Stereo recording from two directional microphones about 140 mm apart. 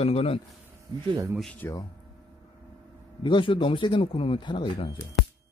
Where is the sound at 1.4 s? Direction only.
5° left (ahead or behind).